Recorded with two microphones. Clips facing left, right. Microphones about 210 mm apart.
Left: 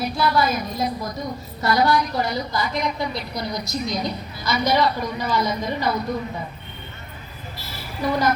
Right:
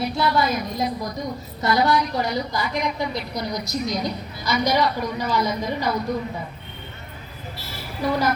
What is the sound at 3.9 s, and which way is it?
A woman's voice, 10° right (ahead or behind).